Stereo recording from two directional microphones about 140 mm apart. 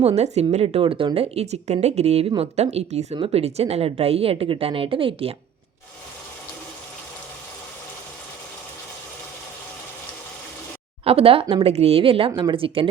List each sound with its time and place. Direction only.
0.0 s a woman's voice: 50° right (ahead or behind)
11.0 s a woman's voice: 45° right (ahead or behind)